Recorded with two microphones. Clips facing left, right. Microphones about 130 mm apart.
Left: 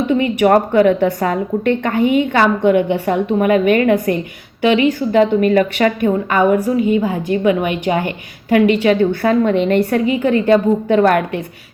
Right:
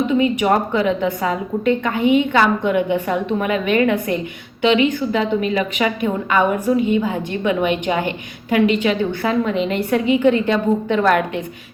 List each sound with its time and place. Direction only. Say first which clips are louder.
0.4 s a woman's voice: left 6 dB; 55° left (ahead or behind)